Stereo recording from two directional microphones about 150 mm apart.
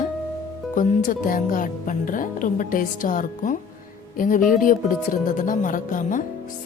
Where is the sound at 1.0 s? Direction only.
65° left (ahead or behind).